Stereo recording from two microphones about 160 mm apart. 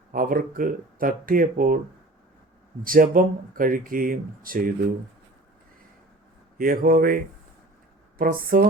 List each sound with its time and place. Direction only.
0.1 s speech: 60° right (ahead or behind)
2.8 s speech: 60° right (ahead or behind)
6.6 s speech: 60° right (ahead or behind)
8.2 s speech: 65° right (ahead or behind)